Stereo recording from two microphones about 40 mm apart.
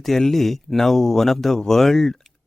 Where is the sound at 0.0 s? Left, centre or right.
Centre.